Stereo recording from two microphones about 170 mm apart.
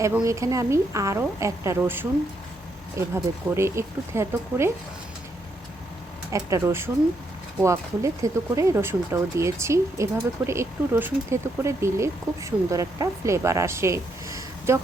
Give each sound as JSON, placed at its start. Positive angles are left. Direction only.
{"t": 0.2, "sound": "speech", "side_deg": -20}
{"t": 3.5, "sound": "speech", "side_deg": -15}
{"t": 6.3, "sound": "speech", "side_deg": -15}